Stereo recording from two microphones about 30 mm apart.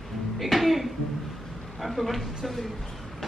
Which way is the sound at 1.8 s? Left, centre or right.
Centre.